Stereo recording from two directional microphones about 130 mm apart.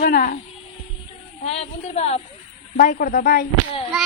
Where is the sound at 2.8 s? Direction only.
90° left.